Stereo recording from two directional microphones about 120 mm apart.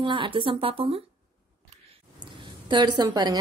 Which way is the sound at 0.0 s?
45° right (ahead or behind).